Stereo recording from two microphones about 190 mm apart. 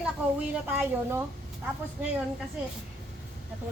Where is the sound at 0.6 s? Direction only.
10° right (ahead or behind).